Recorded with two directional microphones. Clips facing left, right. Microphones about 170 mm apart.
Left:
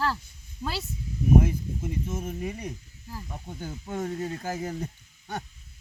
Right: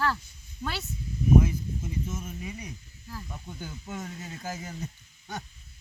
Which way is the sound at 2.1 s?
55° left (ahead or behind).